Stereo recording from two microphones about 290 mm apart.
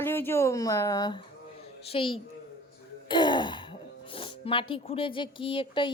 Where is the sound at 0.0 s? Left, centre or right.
Centre.